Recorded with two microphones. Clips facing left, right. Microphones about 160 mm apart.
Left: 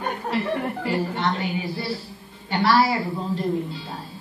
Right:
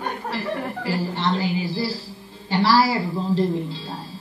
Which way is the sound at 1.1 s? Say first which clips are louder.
Right 2 dB; 30° right (ahead or behind).